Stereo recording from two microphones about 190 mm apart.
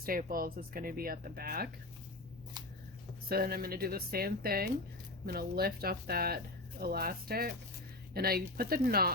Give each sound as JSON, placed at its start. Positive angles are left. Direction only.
{"t": 0.0, "sound": "speech", "side_deg": -50}
{"t": 3.2, "sound": "speech", "side_deg": -55}